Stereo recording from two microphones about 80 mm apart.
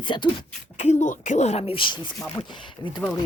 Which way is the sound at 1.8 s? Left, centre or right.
Left.